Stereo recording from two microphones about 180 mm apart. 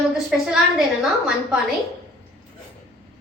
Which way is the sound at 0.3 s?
5° right (ahead or behind).